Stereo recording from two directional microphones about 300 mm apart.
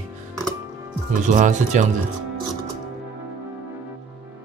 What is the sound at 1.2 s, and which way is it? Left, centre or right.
Speech, right.